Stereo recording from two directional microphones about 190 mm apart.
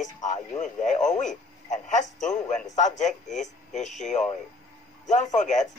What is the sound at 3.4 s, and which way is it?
Speech, 40° left (ahead or behind).